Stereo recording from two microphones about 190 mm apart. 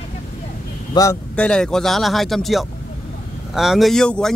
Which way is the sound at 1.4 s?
5° left (ahead or behind).